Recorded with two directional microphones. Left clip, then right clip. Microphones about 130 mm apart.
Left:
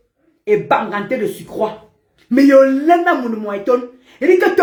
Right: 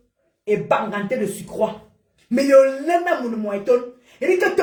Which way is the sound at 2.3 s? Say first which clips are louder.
Left 4 dB; 25° left (ahead or behind).